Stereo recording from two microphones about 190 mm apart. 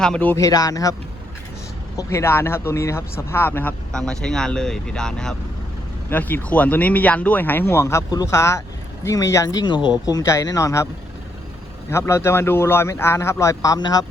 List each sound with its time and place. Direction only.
0.0 s speech: 5° left (ahead or behind)
2.0 s speech: 15° left (ahead or behind)
11.9 s speech: 15° left (ahead or behind)